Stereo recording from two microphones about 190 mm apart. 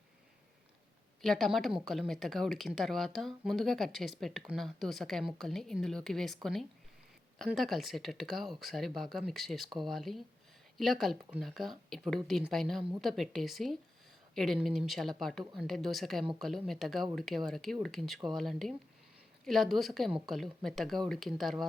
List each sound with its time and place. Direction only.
1.2 s speech: centre (ahead or behind)